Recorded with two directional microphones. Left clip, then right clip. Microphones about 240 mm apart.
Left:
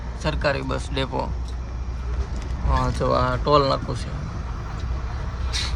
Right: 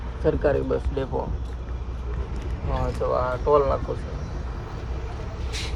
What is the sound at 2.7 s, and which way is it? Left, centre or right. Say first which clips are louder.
Speech: left 3 dB; left.